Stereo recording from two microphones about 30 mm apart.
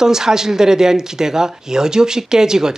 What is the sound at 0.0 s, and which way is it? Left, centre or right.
Speech, centre.